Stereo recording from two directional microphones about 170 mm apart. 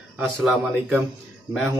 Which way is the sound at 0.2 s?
10° right (ahead or behind).